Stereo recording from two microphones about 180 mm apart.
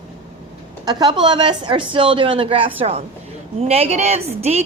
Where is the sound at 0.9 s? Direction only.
20° right (ahead or behind).